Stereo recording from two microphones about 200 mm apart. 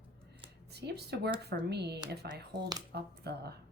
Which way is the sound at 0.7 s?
55° right (ahead or behind).